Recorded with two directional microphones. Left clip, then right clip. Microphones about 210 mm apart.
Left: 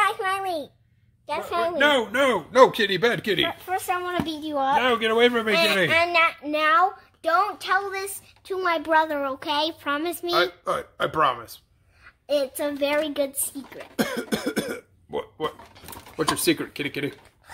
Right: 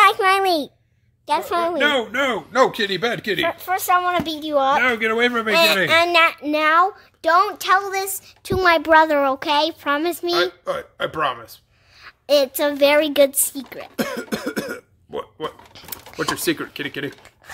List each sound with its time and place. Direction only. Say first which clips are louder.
0.0 s a sound: right 9 dB; 45° right (ahead or behind)
1.2 s a woman's voice: right 5 dB; 35° right (ahead or behind)
1.8 s a man's voice: left 2 dB; centre (ahead or behind)
3.4 s a woman's voice: right 6 dB; 50° right (ahead or behind)
4.7 s a man's voice: right 2 dB; 5° right (ahead or behind)
5.5 s a woman's voice: right 5 dB; 50° right (ahead or behind); by 10.3 s 30° right (ahead or behind)
10.3 s a man's voice: left 1 dB; 5° right (ahead or behind)
12.0 s a woman's voice: right 7 dB; 45° right (ahead or behind)
13.9 s cough: right 1 dB; centre (ahead or behind)
16.2 s a man's voice: right 1 dB; 5° right (ahead or behind)